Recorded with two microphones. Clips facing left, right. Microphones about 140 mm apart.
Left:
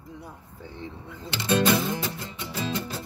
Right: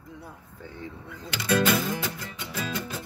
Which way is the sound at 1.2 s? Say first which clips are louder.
Left 1 dB; 30° left (ahead or behind).